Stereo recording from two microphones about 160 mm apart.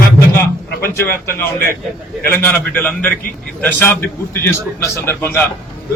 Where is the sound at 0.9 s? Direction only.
15° left (ahead or behind).